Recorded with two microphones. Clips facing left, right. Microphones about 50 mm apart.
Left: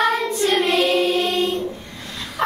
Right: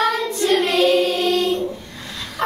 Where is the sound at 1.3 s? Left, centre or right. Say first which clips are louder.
Right 2 dB; right.